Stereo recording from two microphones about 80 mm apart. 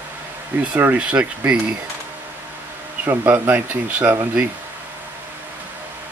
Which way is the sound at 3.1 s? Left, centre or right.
Right.